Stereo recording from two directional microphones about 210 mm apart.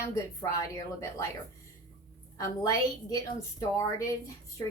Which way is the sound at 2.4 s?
15° left (ahead or behind).